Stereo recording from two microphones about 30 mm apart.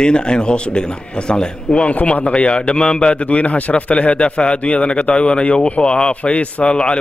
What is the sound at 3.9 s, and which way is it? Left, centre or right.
A man's voice, left.